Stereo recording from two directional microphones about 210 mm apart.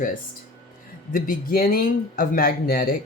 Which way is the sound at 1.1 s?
45° left (ahead or behind).